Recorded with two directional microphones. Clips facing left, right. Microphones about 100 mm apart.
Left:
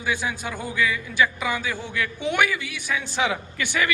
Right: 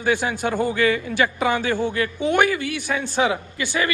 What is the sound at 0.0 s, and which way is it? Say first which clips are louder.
A man's voice: right 6 dB; 55° right (ahead or behind).